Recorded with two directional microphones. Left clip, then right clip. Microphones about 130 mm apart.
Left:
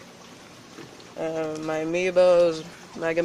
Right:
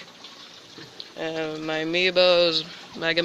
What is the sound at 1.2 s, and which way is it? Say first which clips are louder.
Speech: left 1 dB; centre (ahead or behind).